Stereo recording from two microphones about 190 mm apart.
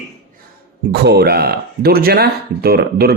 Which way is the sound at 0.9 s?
60° right (ahead or behind).